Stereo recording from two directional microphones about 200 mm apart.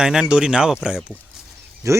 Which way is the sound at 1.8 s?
15° right (ahead or behind).